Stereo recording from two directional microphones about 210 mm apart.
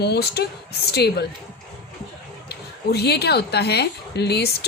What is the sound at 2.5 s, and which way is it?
Speech, 50° left (ahead or behind).